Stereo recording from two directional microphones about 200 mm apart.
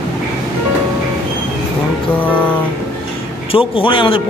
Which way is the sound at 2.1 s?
10° left (ahead or behind).